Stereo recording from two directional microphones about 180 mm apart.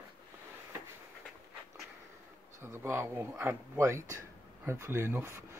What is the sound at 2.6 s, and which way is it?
Speech, 15° right (ahead or behind).